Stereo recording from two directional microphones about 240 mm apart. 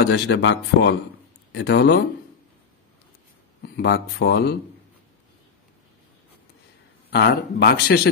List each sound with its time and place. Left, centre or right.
0.0 s speech: left
3.7 s speech: left
7.1 s speech: left